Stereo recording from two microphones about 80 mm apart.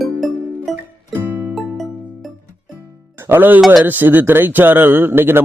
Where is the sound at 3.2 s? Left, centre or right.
Right.